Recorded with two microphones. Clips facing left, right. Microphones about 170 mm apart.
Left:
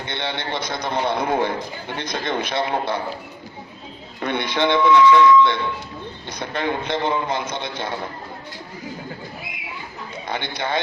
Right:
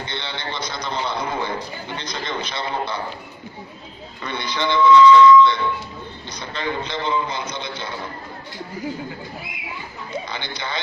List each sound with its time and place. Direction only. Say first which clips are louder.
0.1 s a man's voice: left 4 dB; 55° left (ahead or behind)
4.2 s a man's voice: left 5 dB; 55° left (ahead or behind)
10.2 s a man's voice: left 4 dB; 55° left (ahead or behind)